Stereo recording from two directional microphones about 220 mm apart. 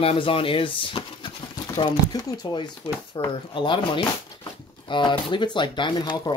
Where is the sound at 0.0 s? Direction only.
25° left (ahead or behind).